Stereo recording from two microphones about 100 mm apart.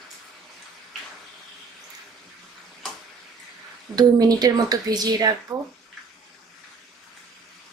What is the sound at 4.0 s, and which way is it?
Speech, 40° right (ahead or behind).